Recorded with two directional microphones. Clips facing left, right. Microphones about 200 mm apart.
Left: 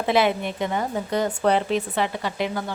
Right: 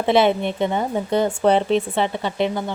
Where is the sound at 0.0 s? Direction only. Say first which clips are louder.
Right 4 dB; 25° right (ahead or behind).